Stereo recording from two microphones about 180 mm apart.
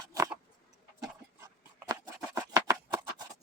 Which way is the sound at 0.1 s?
20° right (ahead or behind).